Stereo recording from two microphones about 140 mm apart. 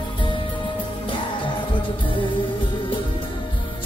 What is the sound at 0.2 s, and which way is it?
Music, 35° left (ahead or behind).